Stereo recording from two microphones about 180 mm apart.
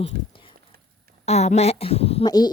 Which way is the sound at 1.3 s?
35° left (ahead or behind).